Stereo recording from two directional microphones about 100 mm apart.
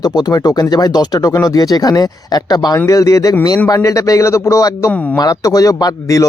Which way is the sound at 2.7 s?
30° left (ahead or behind).